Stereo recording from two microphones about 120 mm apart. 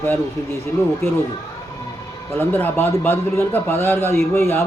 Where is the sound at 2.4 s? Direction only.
20° left (ahead or behind).